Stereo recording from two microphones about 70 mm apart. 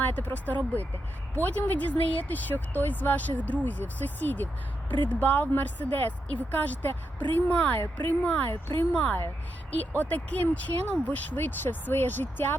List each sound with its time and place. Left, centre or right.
0.0 s speech: left
7.8 s speech: left
8.2 s speech: centre
8.4 s speech: left
8.9 s speech: centre